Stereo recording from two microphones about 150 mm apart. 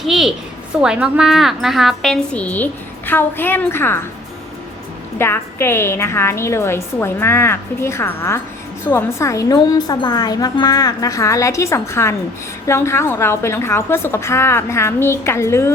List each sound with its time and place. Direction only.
0.0 s a woman's voice: centre (ahead or behind); by 4.0 s 15° left (ahead or behind)
5.1 s a woman's voice: 15° left (ahead or behind)